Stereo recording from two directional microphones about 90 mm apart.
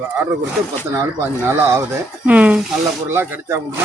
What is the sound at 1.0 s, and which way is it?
Speech, 25° right (ahead or behind).